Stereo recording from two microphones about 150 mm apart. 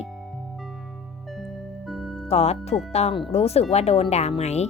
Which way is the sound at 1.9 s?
Centre (ahead or behind).